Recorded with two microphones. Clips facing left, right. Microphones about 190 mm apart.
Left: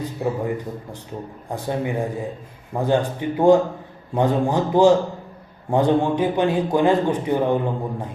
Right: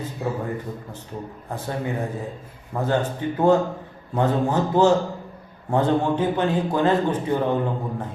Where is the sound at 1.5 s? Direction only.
15° left (ahead or behind).